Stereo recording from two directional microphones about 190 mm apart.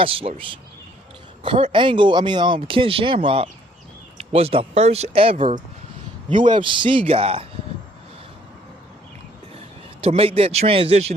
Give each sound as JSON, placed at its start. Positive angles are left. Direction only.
{"t": 0.0, "sound": "speech", "side_deg": -30}
{"t": 10.0, "sound": "speech", "side_deg": -30}